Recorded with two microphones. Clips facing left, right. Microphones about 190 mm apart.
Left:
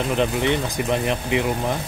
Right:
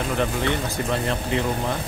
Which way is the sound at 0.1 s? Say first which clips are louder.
Left 3 dB; 20° left (ahead or behind).